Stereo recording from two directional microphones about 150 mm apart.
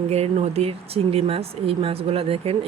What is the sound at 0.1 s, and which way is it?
Speech, 45° right (ahead or behind).